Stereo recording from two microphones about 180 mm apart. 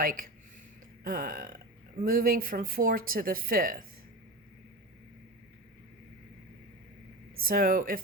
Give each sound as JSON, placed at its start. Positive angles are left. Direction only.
{"t": 0.0, "sound": "speech", "side_deg": -50}
{"t": 7.4, "sound": "speech", "side_deg": -50}